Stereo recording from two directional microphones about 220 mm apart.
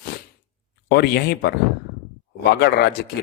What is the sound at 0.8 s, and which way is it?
A man's voice, 50° left (ahead or behind).